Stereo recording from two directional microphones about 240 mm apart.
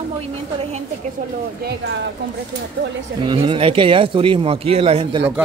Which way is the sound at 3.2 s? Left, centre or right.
Centre.